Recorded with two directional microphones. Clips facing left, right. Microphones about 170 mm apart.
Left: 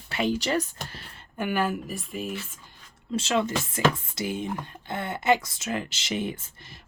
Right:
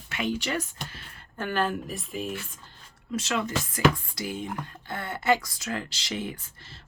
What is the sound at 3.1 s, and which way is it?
Speech, 25° left (ahead or behind).